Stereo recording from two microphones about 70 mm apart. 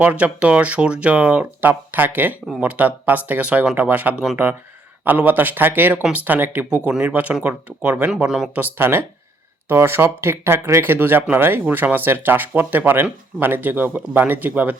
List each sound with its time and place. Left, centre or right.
0.0 s speech: centre